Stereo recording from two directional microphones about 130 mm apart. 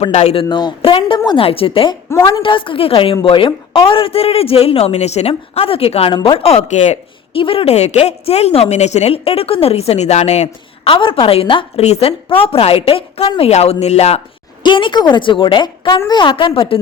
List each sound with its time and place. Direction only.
0.0 s a woman's voice: 55° left (ahead or behind)
0.4 s a woman's voice: 35° left (ahead or behind)
1.5 s a woman's voice: 45° left (ahead or behind); by 7.0 s 65° left (ahead or behind)
7.3 s a woman's voice: 45° left (ahead or behind)
10.8 s a woman's voice: 40° left (ahead or behind)
14.6 s a woman's voice: 40° left (ahead or behind)